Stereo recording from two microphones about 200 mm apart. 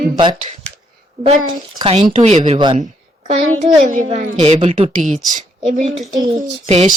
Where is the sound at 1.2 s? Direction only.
35° right (ahead or behind).